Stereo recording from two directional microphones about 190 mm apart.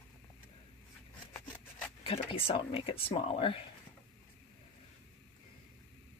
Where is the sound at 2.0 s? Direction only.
30° left (ahead or behind).